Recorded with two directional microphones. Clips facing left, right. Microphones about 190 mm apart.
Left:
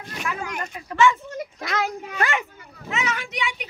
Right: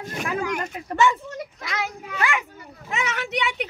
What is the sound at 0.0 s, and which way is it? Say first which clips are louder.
Speech: right 3 dB; 45° right (ahead or behind).